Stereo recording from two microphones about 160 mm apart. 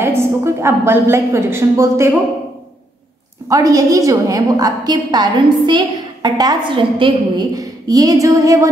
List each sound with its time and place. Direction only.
0.0 s a woman's voice: 15° right (ahead or behind)
3.4 s a woman's voice: 20° right (ahead or behind)